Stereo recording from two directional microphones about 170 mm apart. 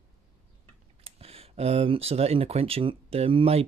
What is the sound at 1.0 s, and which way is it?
Speech, 35° right (ahead or behind).